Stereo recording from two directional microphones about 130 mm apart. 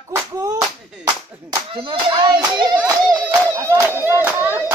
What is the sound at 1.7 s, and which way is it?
Speech, 40° right (ahead or behind).